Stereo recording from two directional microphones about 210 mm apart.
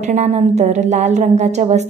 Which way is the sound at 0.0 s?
30° right (ahead or behind).